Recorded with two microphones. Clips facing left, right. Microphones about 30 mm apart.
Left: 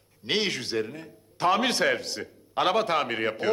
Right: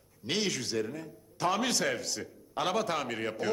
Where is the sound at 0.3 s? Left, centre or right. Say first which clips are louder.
Left 5 dB; left.